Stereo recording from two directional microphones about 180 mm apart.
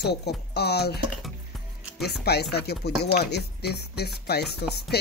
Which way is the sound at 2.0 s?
65° left (ahead or behind).